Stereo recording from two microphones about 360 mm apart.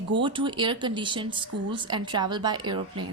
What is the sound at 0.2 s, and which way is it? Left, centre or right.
Speech, centre.